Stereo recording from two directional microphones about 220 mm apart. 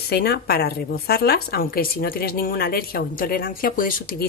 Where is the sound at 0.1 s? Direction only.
45° left (ahead or behind).